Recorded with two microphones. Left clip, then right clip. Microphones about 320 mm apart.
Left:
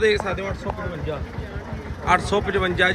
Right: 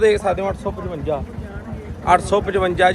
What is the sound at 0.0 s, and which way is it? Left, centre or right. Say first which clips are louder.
Speech: right 5 dB; centre.